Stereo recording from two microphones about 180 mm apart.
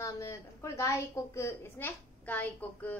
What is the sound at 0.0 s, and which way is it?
A woman's voice, 15° left (ahead or behind).